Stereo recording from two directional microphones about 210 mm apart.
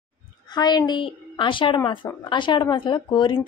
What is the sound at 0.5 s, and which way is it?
Speech, 20° left (ahead or behind).